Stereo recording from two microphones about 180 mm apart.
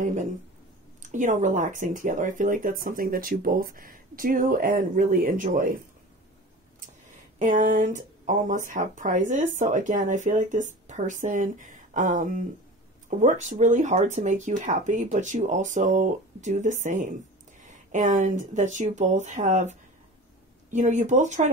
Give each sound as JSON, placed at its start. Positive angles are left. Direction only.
{"t": 0.0, "sound": "speech", "side_deg": -45}
{"t": 7.3, "sound": "speech", "side_deg": -45}